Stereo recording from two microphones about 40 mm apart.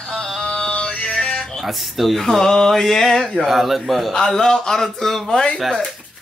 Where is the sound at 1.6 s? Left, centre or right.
Centre.